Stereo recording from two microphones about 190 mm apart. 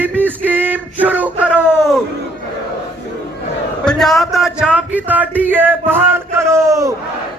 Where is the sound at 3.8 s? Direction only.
5° left (ahead or behind); by 7.0 s 15° right (ahead or behind).